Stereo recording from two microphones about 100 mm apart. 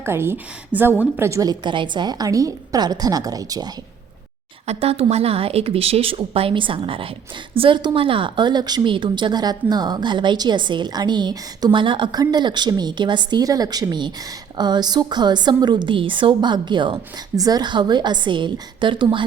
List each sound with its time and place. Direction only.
0.0 s a woman's voice: 25° right (ahead or behind)
1.5 s a woman's voice: 55° right (ahead or behind)
4.6 s a woman's voice: 85° right; by 13.4 s 50° right (ahead or behind)
13.4 s a woman's voice: 35° right (ahead or behind)
17.3 s a woman's voice: 40° right (ahead or behind); by 19.2 s 55° right (ahead or behind)